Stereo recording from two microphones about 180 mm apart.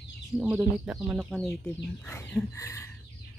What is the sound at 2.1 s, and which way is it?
Speech, 10° left (ahead or behind).